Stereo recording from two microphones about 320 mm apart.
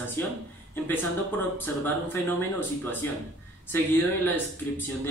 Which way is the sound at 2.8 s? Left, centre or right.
Centre.